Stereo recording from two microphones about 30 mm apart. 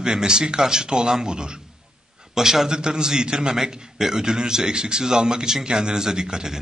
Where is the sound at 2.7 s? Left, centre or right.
Right.